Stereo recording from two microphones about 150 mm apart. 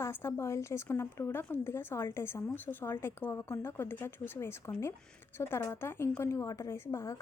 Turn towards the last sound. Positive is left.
turn(degrees=20)  # may be behind; listen again after turning